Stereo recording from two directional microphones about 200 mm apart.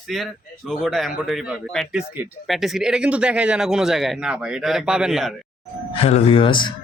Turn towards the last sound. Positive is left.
turn(degrees=25)  # may be behind; listen again after turning